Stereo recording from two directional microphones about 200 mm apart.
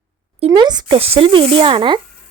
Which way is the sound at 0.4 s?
20° right (ahead or behind).